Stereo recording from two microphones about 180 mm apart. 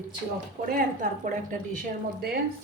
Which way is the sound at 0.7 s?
45° right (ahead or behind).